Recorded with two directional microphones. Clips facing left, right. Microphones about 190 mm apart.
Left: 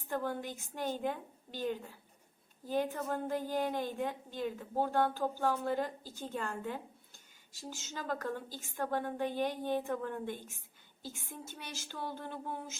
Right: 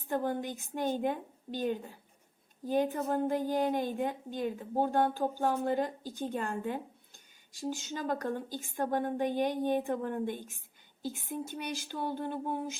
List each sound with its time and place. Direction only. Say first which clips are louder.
0.1 s a woman's voice: right 4 dB; 20° right (ahead or behind)